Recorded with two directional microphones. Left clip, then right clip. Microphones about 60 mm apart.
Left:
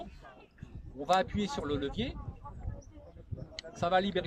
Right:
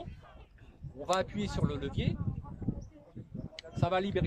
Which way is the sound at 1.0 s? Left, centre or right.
Right.